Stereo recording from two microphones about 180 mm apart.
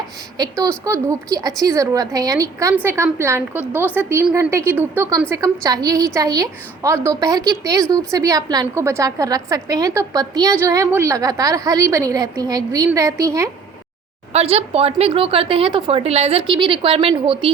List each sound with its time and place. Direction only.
0.3 s a woman's voice: 20° right (ahead or behind)
14.3 s a woman's voice: 35° right (ahead or behind)